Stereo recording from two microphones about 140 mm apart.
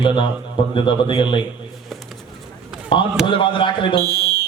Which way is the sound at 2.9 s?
35° left (ahead or behind).